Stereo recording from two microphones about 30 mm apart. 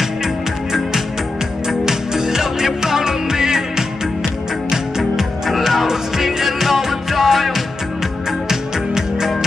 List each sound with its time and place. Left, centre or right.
1.7 s music: centre
8.3 s music: centre